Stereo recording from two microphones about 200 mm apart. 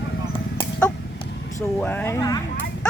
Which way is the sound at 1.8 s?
10° left (ahead or behind).